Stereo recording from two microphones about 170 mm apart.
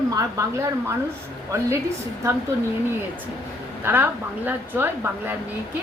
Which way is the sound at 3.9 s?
10° right (ahead or behind).